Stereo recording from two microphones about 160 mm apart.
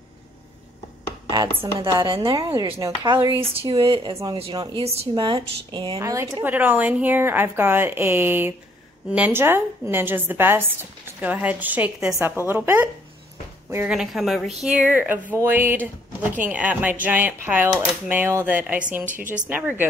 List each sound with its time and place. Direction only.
1.3 s speech: 25° right (ahead or behind)
5.9 s speech: 20° right (ahead or behind)
13.8 s a woman's voice: 5° right (ahead or behind)
19.0 s a woman's voice: 55° right (ahead or behind)
19.4 s speech: 10° right (ahead or behind)